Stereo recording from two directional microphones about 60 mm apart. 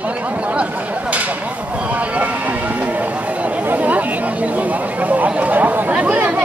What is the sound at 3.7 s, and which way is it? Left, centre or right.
Speech, right.